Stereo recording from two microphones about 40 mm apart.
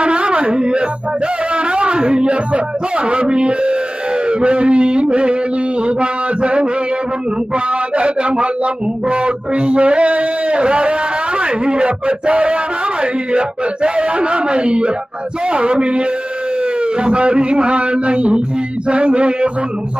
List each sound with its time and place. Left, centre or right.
0.0 s music: right
1.5 s a man's voice: right